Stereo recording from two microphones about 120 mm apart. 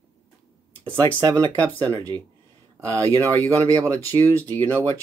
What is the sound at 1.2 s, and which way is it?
Speech, 30° right (ahead or behind).